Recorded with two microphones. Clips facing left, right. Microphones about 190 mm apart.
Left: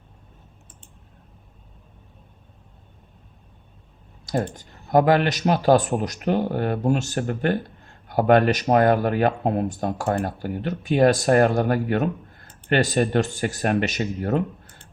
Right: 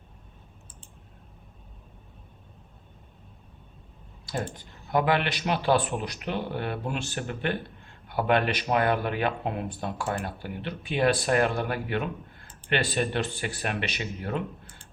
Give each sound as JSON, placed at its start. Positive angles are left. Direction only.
{"t": 4.3, "sound": "speech", "side_deg": 45}